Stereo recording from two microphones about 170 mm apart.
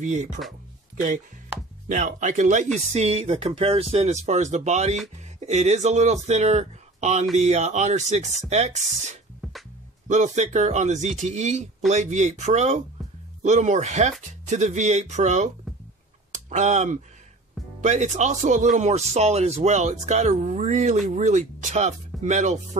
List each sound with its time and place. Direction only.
0.0 s speech: 45° right (ahead or behind)
1.9 s speech: 50° right (ahead or behind)
9.4 s music: centre (ahead or behind)
10.0 s speech: 45° right (ahead or behind)
16.3 s a sound: 45° right (ahead or behind)
17.7 s speech: 45° right (ahead or behind)